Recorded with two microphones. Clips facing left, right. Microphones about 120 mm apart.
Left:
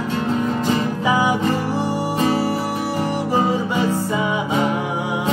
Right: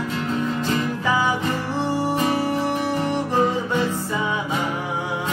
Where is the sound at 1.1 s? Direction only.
15° left (ahead or behind).